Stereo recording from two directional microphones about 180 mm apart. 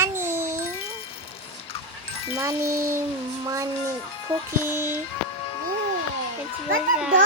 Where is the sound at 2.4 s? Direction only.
15° right (ahead or behind).